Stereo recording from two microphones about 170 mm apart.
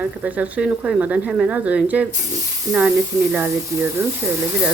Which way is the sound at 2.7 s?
20° right (ahead or behind).